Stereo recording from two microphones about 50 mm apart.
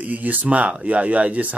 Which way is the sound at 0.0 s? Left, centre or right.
Right.